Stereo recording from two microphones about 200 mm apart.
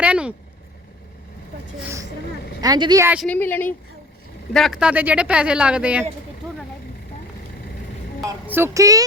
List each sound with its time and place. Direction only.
0.0 s speech: 5° right (ahead or behind)
2.6 s speech: 20° right (ahead or behind)
3.2 s a woman's voice: 5° left (ahead or behind)
4.5 s speech: centre (ahead or behind)
8.2 s speech: 10° right (ahead or behind)